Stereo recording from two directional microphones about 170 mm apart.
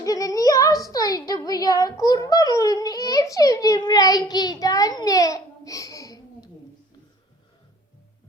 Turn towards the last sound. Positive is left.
turn(degrees=20)  # may be behind; listen again after turning